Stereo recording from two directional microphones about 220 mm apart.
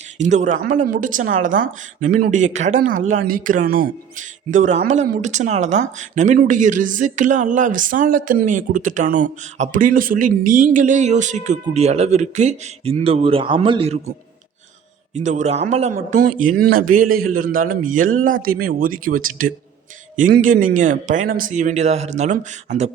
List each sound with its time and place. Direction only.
0.2 s speech: 30° right (ahead or behind)
15.1 s speech: 35° right (ahead or behind)